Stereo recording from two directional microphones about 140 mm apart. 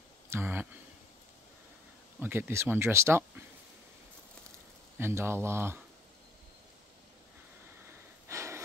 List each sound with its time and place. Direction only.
0.3 s speech: 15° right (ahead or behind)
2.1 s speech: 15° right (ahead or behind)
4.9 s speech: 15° right (ahead or behind)
8.3 s a sound: 20° right (ahead or behind)